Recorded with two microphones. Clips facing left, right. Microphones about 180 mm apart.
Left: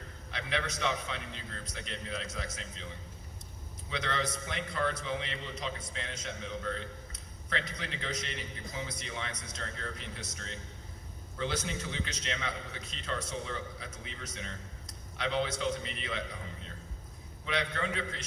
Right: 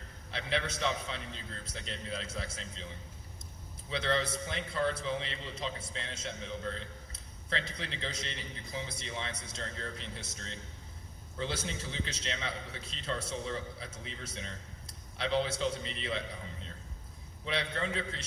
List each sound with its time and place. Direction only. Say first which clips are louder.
0.3 s a man's voice: right 1 dB; 30° right (ahead or behind)
3.8 s a man's voice: right 2 dB; 30° right (ahead or behind)
17.4 s a man's voice: left 1 dB; 30° right (ahead or behind)